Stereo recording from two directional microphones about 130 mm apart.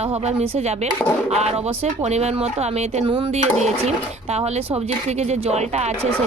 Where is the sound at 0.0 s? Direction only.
55° right (ahead or behind).